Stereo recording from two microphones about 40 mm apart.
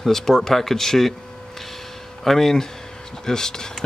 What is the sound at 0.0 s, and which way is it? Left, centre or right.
Speech, centre.